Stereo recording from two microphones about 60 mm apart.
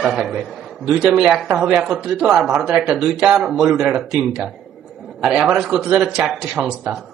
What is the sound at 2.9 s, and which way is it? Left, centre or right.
Speech, centre.